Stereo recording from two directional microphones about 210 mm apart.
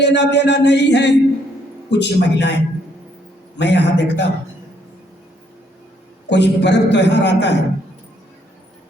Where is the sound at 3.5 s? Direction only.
55° left (ahead or behind).